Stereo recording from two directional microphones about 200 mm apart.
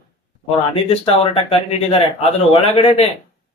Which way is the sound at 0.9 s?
30° left (ahead or behind).